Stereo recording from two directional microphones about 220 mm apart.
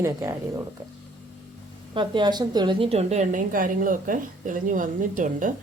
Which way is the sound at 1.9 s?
20° right (ahead or behind).